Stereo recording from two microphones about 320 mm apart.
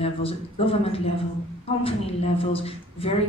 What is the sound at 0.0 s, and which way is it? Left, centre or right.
Speech, centre.